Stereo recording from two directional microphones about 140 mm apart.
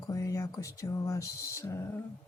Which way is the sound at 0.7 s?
25° left (ahead or behind).